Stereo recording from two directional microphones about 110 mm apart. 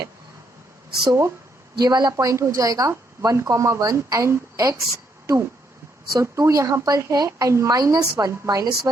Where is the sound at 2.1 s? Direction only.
30° right (ahead or behind).